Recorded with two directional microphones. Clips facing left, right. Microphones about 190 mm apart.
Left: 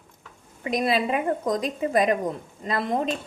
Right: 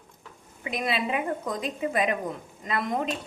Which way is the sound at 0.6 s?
40° left (ahead or behind).